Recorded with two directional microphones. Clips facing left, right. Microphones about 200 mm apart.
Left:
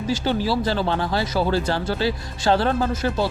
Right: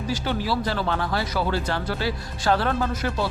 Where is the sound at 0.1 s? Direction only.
30° left (ahead or behind).